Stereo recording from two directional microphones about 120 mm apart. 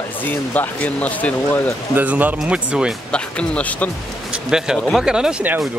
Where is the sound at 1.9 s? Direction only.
15° right (ahead or behind).